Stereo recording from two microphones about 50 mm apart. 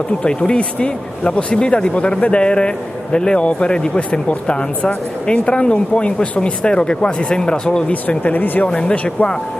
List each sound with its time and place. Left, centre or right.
0.2 s speech: left
7.9 s speech: left
8.6 s speech: centre